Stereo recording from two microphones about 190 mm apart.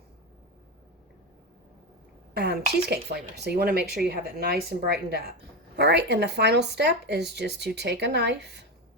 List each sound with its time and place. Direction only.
2.3 s speech: 60° right (ahead or behind)